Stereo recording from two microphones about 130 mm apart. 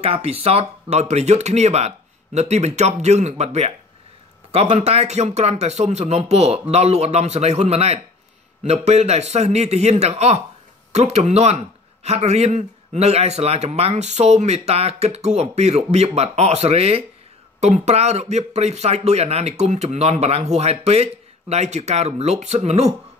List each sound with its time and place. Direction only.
0.0 s a man's voice: 50° right (ahead or behind)